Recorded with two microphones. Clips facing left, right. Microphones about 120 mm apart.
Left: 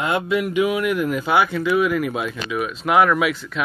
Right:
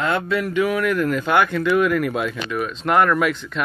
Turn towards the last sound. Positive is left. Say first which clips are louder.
# even
turn(degrees=5)  # may be behind; listen again after turning